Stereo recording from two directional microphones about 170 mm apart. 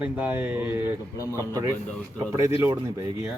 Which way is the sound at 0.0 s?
10° right (ahead or behind).